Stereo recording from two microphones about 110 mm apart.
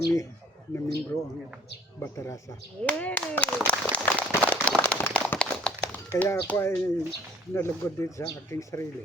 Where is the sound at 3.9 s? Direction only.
10° left (ahead or behind).